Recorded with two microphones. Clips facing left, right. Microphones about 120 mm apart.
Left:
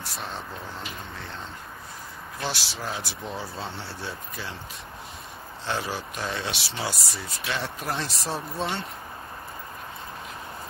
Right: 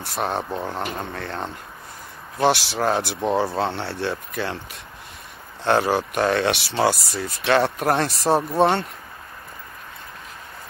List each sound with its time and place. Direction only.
0.0 s speech: 60° right (ahead or behind)
2.7 s speech: 65° right (ahead or behind)
5.6 s speech: 60° right (ahead or behind)